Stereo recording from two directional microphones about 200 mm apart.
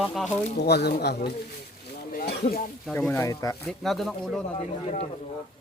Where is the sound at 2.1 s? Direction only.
50° left (ahead or behind).